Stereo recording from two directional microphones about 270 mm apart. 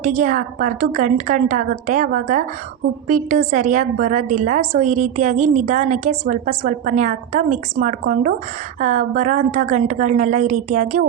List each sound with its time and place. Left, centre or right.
0.0 s a woman's voice: right